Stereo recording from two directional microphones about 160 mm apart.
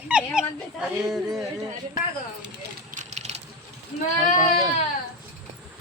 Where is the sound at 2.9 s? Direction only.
50° right (ahead or behind).